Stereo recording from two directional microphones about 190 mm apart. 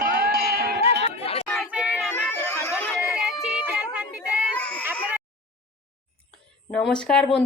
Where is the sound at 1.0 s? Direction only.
30° left (ahead or behind).